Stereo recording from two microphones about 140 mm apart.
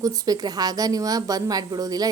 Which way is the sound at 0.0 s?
25° right (ahead or behind).